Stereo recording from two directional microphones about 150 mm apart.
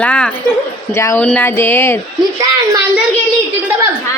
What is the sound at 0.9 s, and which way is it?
A woman's voice, 20° left (ahead or behind).